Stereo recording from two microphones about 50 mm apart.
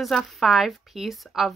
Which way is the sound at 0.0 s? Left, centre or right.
Centre.